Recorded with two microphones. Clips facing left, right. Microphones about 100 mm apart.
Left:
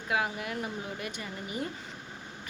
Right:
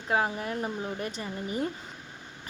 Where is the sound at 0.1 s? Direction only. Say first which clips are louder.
Right 3 dB; 35° right (ahead or behind).